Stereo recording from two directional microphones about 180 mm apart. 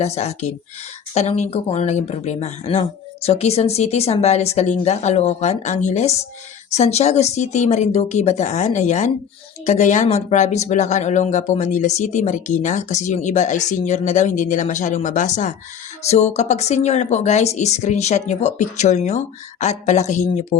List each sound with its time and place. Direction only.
0.0 s speech: 35° left (ahead or behind)